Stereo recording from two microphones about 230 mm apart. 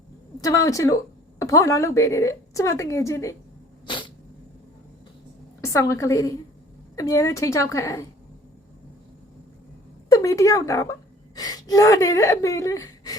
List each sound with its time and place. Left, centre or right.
0.4 s speech: centre
3.8 s dog: left
5.6 s speech: centre
10.1 s speech: centre